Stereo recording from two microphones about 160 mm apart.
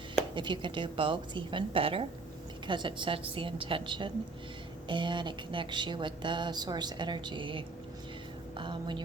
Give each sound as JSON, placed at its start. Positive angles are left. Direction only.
{"t": 0.3, "sound": "a woman's voice", "side_deg": -30}